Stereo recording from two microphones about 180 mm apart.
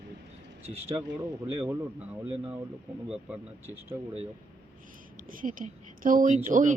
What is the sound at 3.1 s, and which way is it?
Speech, 5° right (ahead or behind).